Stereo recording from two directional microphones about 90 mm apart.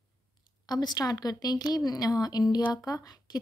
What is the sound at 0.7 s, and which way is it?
A woman's voice, 45° left (ahead or behind).